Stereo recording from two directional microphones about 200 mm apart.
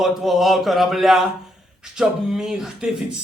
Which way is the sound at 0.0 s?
Centre (ahead or behind).